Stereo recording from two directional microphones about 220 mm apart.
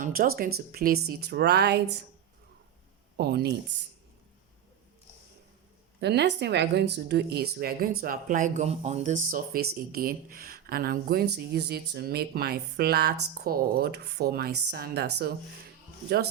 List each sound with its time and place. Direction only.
0.0 s speech: 40° right (ahead or behind)
3.2 s speech: 45° right (ahead or behind)
6.0 s speech: 50° right (ahead or behind)